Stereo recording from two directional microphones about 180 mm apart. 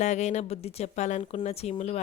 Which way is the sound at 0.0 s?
40° left (ahead or behind).